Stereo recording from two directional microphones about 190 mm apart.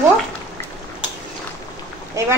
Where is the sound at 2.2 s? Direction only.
15° right (ahead or behind).